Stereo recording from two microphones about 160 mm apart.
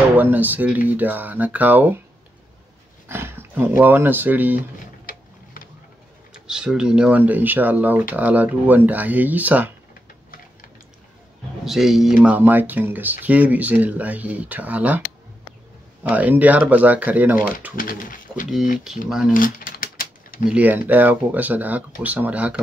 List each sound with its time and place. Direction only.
0.1 s speech: 10° right (ahead or behind)
3.1 s speech: 15° right (ahead or behind)
5.0 s a sound: 60° left (ahead or behind)
6.3 s speech: 5° right (ahead or behind)
11.6 s speech: centre (ahead or behind)
16.0 s speech: 10° right (ahead or behind)
17.7 s speech: 60° left (ahead or behind)
18.9 s speech: 5° right (ahead or behind)
19.3 s a sound: 60° left (ahead or behind)
20.4 s speech: 10° right (ahead or behind)